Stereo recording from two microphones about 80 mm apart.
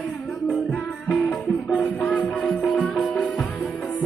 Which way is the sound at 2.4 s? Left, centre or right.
Centre.